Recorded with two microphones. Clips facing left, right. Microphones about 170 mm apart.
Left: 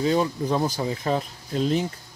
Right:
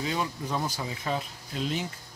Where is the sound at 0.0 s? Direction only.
35° left (ahead or behind).